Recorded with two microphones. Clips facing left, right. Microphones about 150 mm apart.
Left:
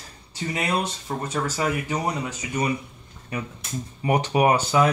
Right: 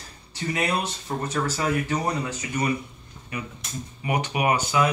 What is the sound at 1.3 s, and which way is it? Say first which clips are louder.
Speech: even; 20° left (ahead or behind).